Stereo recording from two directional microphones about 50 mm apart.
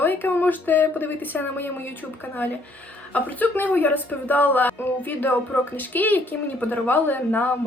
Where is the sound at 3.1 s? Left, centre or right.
Left.